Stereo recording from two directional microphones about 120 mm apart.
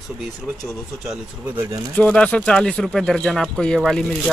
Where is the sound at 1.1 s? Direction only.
20° right (ahead or behind).